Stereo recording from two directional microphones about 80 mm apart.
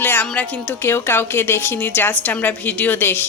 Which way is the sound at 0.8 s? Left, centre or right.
Left.